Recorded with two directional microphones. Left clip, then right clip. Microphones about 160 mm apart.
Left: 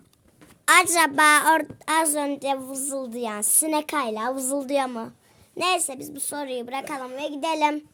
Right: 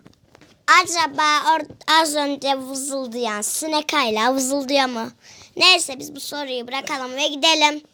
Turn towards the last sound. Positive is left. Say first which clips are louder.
# right 7 dB
turn(degrees=5)  # may be behind; listen again after turning